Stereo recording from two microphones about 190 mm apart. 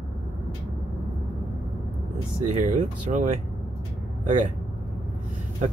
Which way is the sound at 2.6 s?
40° right (ahead or behind).